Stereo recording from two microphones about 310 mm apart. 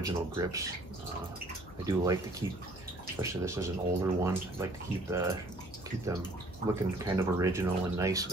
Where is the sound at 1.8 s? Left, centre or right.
Centre.